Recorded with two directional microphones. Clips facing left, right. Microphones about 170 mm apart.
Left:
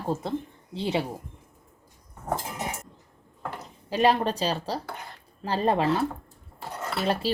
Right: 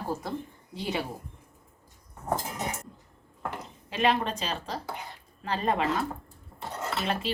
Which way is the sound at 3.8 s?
35° left (ahead or behind).